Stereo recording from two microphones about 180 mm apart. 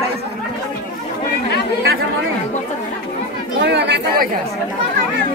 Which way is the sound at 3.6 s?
70° right (ahead or behind).